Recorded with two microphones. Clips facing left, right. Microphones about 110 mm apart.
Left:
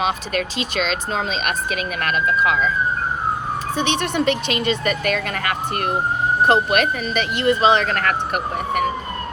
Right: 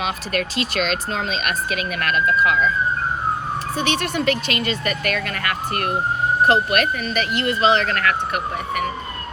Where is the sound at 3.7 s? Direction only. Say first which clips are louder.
Left 2 dB; 45° right (ahead or behind).